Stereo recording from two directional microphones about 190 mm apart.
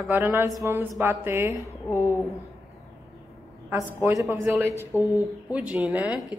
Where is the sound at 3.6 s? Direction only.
10° right (ahead or behind).